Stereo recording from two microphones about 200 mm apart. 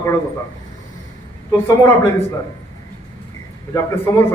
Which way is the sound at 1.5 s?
10° left (ahead or behind).